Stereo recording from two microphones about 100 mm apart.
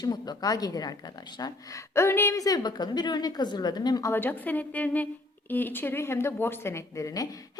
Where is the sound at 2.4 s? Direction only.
40° left (ahead or behind).